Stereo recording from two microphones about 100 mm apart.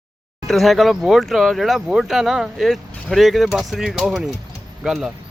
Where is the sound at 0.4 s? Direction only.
Centre (ahead or behind).